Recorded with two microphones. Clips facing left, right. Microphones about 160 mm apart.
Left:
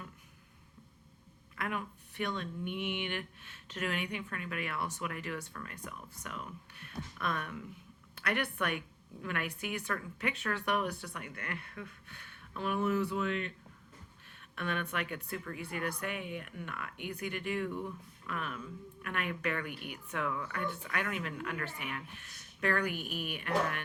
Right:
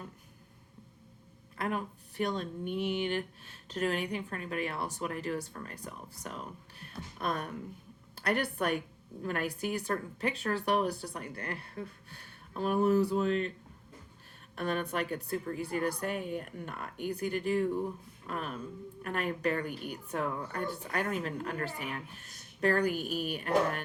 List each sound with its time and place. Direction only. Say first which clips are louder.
1.5 s speech: right 4 dB; 35° right (ahead or behind)
14.5 s speech: right 4 dB; 35° right (ahead or behind)